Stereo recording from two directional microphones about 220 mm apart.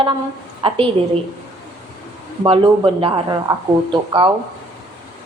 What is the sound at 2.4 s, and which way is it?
Speech, 25° right (ahead or behind).